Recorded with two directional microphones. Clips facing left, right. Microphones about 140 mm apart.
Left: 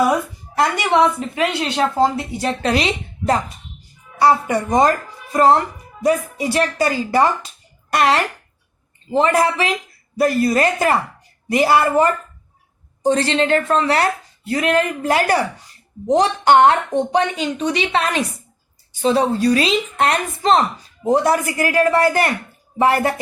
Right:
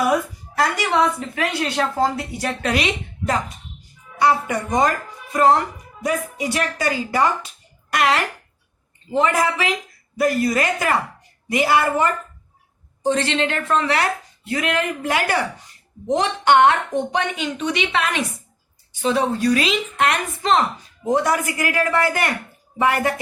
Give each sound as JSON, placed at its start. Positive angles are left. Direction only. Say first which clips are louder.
{"t": 0.6, "sound": "a woman's voice", "louder": "left 3 dB", "side_deg": 25}
{"t": 6.0, "sound": "a woman's voice", "louder": "left 5 dB", "side_deg": 35}